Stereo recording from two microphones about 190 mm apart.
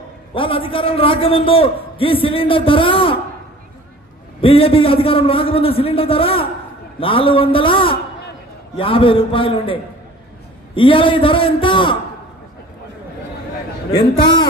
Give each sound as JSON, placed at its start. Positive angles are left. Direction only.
{"t": 0.3, "sound": "a man's voice", "side_deg": 30}
{"t": 4.4, "sound": "a man's voice", "side_deg": 30}
{"t": 13.9, "sound": "a man's voice", "side_deg": 25}